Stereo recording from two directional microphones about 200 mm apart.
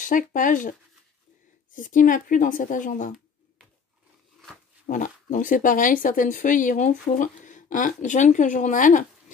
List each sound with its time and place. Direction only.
0.0 s speech: 40° left (ahead or behind)
1.8 s speech: 40° left (ahead or behind)
4.8 s speech: 40° left (ahead or behind)